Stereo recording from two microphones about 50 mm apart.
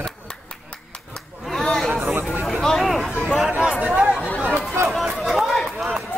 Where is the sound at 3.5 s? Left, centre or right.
Centre.